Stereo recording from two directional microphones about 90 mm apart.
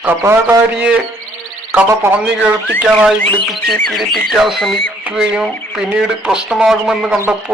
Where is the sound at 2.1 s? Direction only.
15° right (ahead or behind).